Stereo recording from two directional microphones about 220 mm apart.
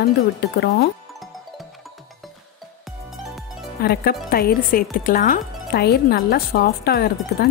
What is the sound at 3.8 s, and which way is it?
Speech, 45° left (ahead or behind).